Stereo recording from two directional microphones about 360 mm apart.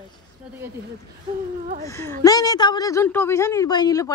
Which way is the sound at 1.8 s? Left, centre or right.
Centre.